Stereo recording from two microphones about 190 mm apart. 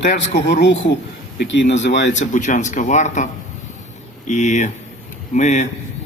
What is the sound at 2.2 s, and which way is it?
A man's voice, 40° left (ahead or behind).